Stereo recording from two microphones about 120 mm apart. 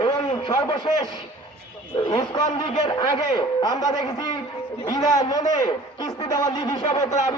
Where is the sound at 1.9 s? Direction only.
35° left (ahead or behind).